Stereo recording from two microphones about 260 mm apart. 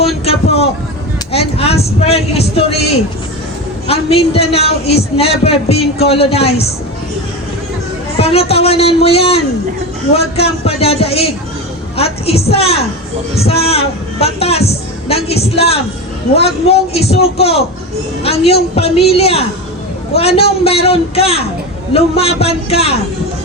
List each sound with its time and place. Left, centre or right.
0.3 s speech: left
8.2 s speech: left